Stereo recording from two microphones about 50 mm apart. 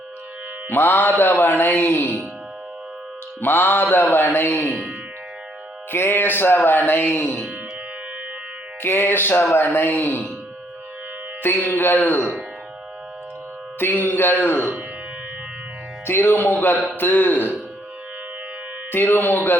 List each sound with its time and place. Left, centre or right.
0.7 s speech: left
3.4 s speech: left
4.7 s speech: right
5.9 s speech: left
8.8 s speech: left
11.4 s speech: left
13.7 s speech: left
16.0 s speech: left
18.9 s speech: left